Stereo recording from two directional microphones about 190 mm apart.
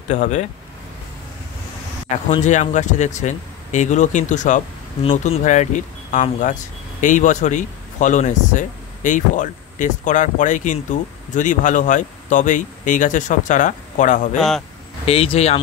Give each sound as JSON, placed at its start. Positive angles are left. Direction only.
{"t": 0.1, "sound": "speech", "side_deg": 40}
{"t": 2.0, "sound": "speech", "side_deg": 35}
{"t": 15.0, "sound": "speech", "side_deg": 30}